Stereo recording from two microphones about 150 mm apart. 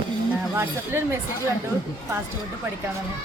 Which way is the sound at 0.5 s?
15° right (ahead or behind).